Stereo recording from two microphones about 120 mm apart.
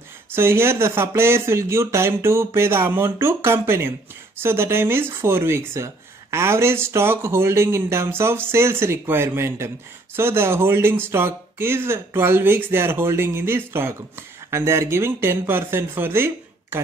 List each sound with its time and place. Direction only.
0.3 s speech: 20° right (ahead or behind)